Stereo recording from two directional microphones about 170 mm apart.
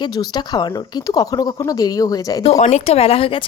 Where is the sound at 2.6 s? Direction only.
40° left (ahead or behind).